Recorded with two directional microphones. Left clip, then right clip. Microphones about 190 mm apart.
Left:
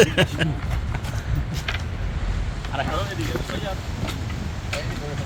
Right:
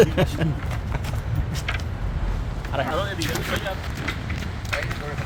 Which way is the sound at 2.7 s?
80° right.